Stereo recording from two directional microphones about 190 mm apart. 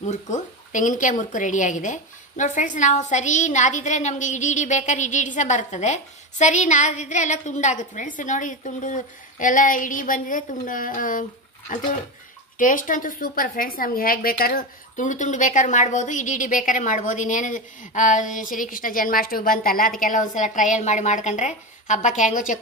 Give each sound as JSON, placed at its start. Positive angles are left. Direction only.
{"t": 0.0, "sound": "a woman's voice", "side_deg": 40}